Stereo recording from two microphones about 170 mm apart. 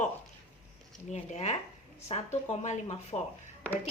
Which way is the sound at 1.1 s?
40° left (ahead or behind).